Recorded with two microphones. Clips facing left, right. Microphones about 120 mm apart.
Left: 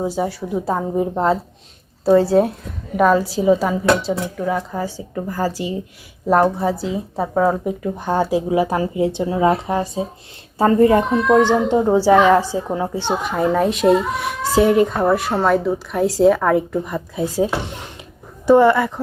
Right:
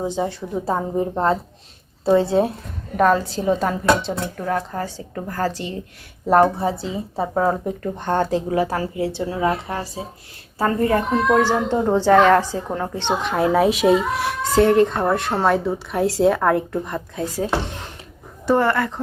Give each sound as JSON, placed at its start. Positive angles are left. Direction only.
{"t": 0.0, "sound": "a woman's voice", "side_deg": 5}
{"t": 17.2, "sound": "speech", "side_deg": 15}